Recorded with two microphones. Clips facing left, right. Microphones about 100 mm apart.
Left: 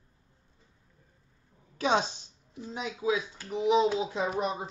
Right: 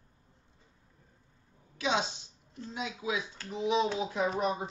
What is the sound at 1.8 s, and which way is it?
Speech, 45° left (ahead or behind).